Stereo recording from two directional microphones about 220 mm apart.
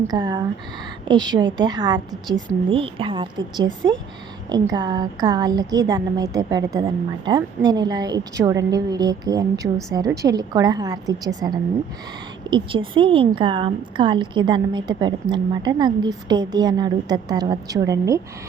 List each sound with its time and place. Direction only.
0.1 s a woman's voice: 20° right (ahead or behind)